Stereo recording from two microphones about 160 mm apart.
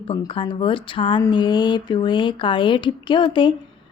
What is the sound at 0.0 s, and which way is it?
A woman's voice, 30° left (ahead or behind).